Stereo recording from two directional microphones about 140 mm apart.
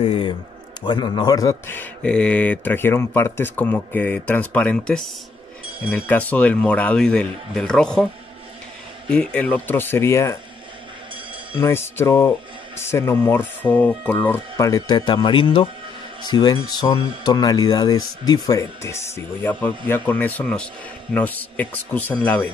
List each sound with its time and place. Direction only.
0.0 s a sound: 35° left (ahead or behind)
0.8 s speech: 30° left (ahead or behind); by 8.1 s 5° left (ahead or behind)
9.1 s speech: 10° left (ahead or behind)
11.6 s speech: 20° left (ahead or behind)